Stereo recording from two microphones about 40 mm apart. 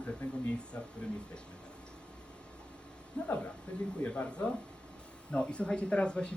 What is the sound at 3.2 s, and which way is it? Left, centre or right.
Speech, left.